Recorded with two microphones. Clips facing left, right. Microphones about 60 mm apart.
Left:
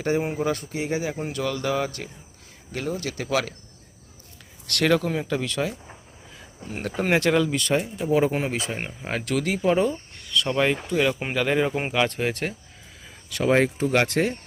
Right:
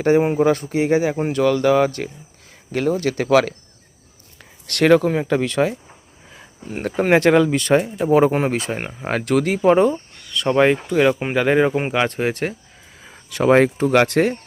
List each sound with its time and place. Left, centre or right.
0.0 s speech: right
2.7 s speech: right
4.6 s speech: right
6.6 s speech: centre
6.8 s speech: right
7.7 s speech: right
9.2 s speech: right
13.4 s speech: right